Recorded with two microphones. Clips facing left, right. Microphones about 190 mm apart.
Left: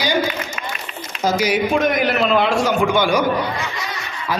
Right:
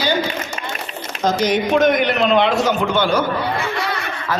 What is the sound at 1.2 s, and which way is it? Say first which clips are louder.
A man's voice: right 1 dB; 10° left (ahead or behind).